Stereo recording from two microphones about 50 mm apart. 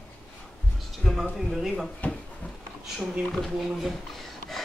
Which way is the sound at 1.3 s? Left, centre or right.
Centre.